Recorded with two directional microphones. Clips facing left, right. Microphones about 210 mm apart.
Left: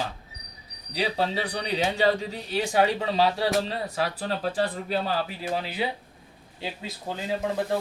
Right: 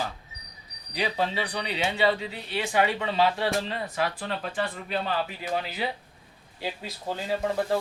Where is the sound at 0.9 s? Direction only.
35° left (ahead or behind).